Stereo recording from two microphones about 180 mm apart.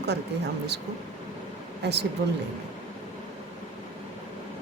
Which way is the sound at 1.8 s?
70° right (ahead or behind).